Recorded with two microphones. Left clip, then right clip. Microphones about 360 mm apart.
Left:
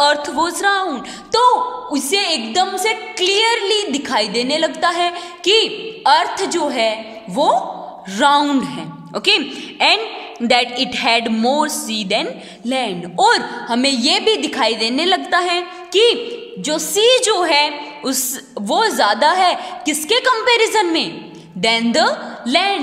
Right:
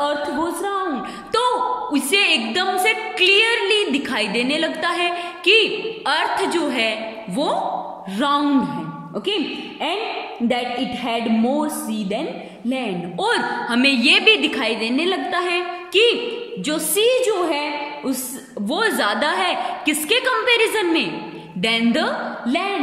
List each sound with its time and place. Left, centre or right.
0.0 s a sound: left
2.0 s a woman's voice: centre
11.0 s a woman's voice: left